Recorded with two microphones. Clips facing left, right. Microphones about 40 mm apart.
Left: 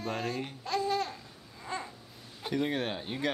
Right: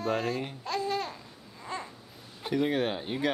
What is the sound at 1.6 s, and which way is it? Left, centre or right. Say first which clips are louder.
Babbling: even; centre.